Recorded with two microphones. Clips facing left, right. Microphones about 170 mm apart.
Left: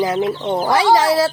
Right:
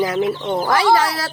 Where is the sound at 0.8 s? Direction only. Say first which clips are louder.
Left 3 dB; 30° left (ahead or behind).